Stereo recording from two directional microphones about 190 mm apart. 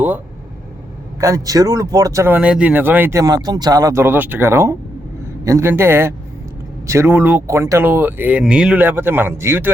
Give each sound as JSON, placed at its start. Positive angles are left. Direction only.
{"t": 1.2, "sound": "speech", "side_deg": -15}